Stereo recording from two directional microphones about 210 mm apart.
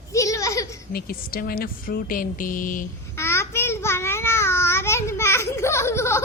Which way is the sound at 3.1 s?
10° left (ahead or behind).